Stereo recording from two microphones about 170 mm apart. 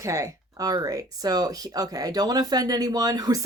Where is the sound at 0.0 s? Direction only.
20° right (ahead or behind).